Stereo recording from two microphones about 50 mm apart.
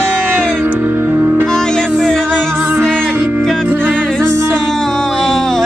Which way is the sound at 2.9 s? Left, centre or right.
Centre.